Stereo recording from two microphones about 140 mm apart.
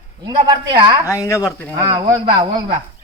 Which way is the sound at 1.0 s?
20° left (ahead or behind).